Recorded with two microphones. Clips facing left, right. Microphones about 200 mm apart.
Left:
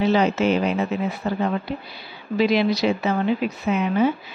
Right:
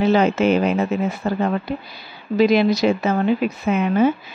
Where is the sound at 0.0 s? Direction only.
50° right (ahead or behind).